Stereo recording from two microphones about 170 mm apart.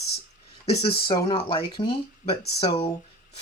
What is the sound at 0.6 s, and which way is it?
Speech, 35° left (ahead or behind).